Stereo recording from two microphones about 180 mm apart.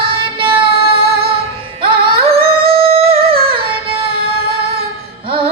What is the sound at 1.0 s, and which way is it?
Music, 60° right (ahead or behind).